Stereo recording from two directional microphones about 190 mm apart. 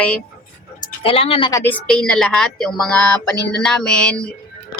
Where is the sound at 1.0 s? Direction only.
30° left (ahead or behind).